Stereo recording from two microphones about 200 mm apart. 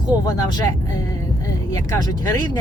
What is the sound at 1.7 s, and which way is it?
Speech, 15° left (ahead or behind).